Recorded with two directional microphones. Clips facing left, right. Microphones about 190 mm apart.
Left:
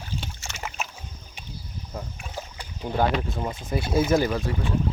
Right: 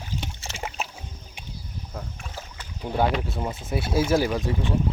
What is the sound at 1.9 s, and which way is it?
Rowboat, 10° left (ahead or behind).